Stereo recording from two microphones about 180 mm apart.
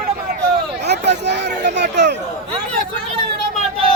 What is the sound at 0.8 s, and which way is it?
Speech, 70° right (ahead or behind).